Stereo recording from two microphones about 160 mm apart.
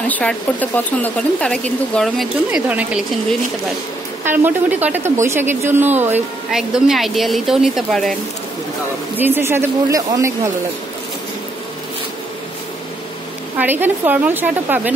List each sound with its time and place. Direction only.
0.1 s speech: 10° left (ahead or behind)
2.7 s speech: 10° right (ahead or behind)
4.2 s speech: 15° right (ahead or behind)
6.5 s speech: centre (ahead or behind)
9.1 s speech: 10° right (ahead or behind)
13.6 s speech: 10° right (ahead or behind)